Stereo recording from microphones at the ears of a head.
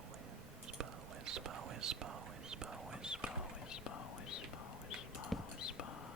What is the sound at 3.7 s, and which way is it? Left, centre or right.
Whispering, left.